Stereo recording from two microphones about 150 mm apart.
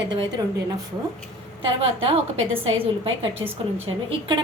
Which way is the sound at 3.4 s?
30° right (ahead or behind).